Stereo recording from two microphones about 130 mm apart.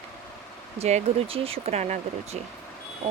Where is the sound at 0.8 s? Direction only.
50° right (ahead or behind).